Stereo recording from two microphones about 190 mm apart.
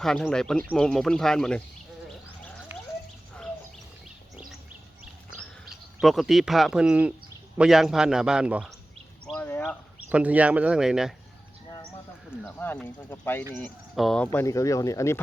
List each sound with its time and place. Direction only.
0.0 s a man's voice: 5° left (ahead or behind)
2.7 s chicken: 10° right (ahead or behind)
5.4 s a man's voice: centre (ahead or behind)
9.2 s a sound: 10° left (ahead or behind)
10.1 s speech: 5° right (ahead or behind)
12.5 s a man's voice: 10° left (ahead or behind)
14.3 s speech: 15° left (ahead or behind)